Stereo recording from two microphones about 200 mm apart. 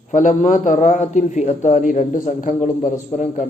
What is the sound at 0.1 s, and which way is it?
Speech, 40° left (ahead or behind).